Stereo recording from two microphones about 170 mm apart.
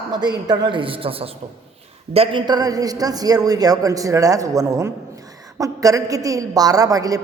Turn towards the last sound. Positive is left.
turn(degrees=-20)  # may be behind; listen again after turning